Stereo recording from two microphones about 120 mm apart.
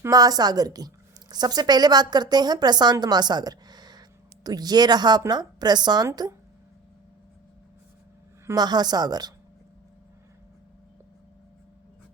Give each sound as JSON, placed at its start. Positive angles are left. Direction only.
{"t": 0.0, "sound": "a woman's voice", "side_deg": -30}
{"t": 8.5, "sound": "a woman's voice", "side_deg": -35}